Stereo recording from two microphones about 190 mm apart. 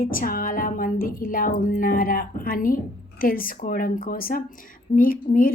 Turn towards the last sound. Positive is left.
turn(degrees=45)  # may be behind; listen again after turning